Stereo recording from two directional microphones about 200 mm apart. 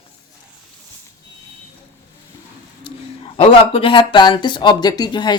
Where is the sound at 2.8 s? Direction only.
25° left (ahead or behind).